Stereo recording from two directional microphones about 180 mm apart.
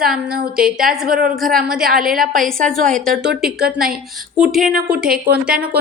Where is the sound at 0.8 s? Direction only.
50° right (ahead or behind).